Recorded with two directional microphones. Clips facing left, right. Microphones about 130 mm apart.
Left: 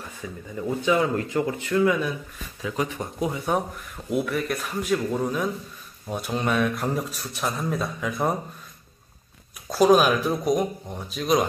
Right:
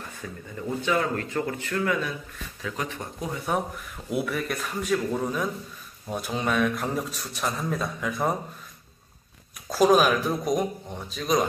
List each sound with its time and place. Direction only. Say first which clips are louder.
0.2 s speech: left 4 dB; 10° left (ahead or behind)
4.1 s a man's voice: left 3 dB; centre (ahead or behind)
9.7 s a man's voice: left 2 dB; centre (ahead or behind)